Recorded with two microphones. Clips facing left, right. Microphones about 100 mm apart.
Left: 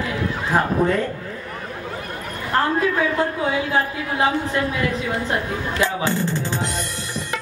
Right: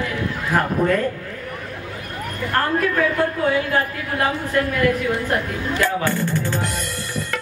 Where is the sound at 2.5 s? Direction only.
15° left (ahead or behind).